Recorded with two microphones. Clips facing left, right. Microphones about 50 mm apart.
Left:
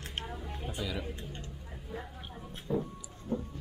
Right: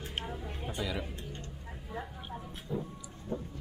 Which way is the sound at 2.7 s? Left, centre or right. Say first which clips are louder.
Left 4 dB; left.